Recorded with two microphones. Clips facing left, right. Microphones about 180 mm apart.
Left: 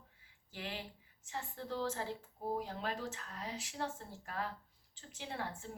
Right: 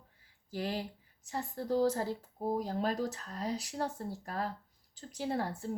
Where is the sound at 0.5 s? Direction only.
40° right (ahead or behind).